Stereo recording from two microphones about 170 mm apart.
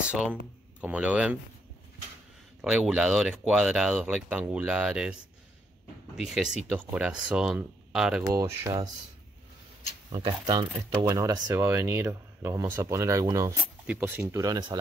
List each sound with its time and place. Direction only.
0.7 s speech: 10° right (ahead or behind)
2.6 s speech: centre (ahead or behind)
6.1 s speech: centre (ahead or behind)
8.3 s speech: 20° right (ahead or behind)
10.4 s speech: 30° right (ahead or behind)
11.1 s speech: 20° right (ahead or behind)